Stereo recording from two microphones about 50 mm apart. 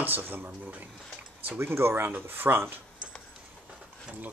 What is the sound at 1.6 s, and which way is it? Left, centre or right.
Speech, right.